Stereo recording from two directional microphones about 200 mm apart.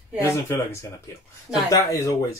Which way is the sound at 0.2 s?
10° left (ahead or behind).